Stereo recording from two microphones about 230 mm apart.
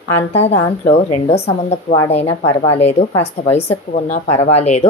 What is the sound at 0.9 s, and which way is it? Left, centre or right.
Speech, left.